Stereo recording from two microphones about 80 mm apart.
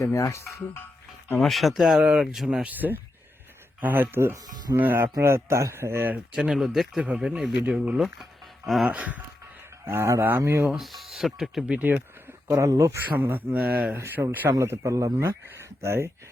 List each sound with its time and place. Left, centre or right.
0.0 s speech: left
1.4 s speech: centre
2.6 s speech: right
4.4 s speech: right
4.8 s speech: right
6.3 s speech: centre
8.9 s speech: centre
9.8 s speech: right
10.7 s speech: centre
12.5 s speech: right
13.1 s speech: right
14.6 s speech: right
15.2 s speech: right